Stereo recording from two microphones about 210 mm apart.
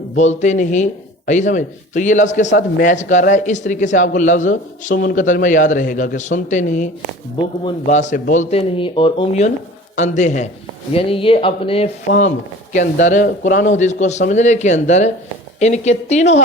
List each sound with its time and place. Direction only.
0.2 s a man's voice: 35° left (ahead or behind)
2.5 s a man's voice: 55° left (ahead or behind)
2.8 s a man's voice: 35° left (ahead or behind)
12.1 s speech: 55° left (ahead or behind)
12.7 s a man's voice: 35° left (ahead or behind)